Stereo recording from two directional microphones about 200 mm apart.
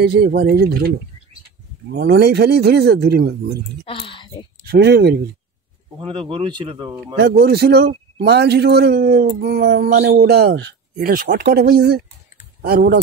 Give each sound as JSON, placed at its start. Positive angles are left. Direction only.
{"t": 0.0, "sound": "a man's voice", "side_deg": -55}
{"t": 2.0, "sound": "a man's voice", "side_deg": -55}
{"t": 3.8, "sound": "speech", "side_deg": 25}
{"t": 4.6, "sound": "a man's voice", "side_deg": -55}
{"t": 5.9, "sound": "speech", "side_deg": -25}
{"t": 7.2, "sound": "a man's voice", "side_deg": -50}
{"t": 11.0, "sound": "a man's voice", "side_deg": -45}